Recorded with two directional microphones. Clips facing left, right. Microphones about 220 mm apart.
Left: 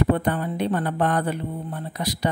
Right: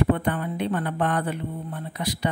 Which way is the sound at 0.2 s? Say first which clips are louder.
Left 2 dB; 40° left (ahead or behind).